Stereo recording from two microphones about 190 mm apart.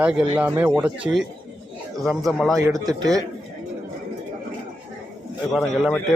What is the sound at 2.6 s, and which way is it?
Speech, 15° right (ahead or behind).